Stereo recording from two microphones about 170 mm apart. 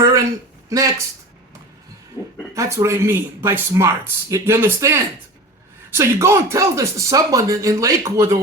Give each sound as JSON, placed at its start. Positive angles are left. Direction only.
{"t": 0.7, "sound": "speech", "side_deg": -20}
{"t": 2.6, "sound": "speech", "side_deg": -15}